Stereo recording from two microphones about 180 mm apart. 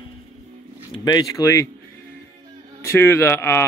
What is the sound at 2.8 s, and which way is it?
Speech, 15° left (ahead or behind).